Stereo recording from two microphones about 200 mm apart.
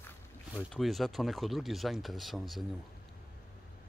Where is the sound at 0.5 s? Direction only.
Centre (ahead or behind).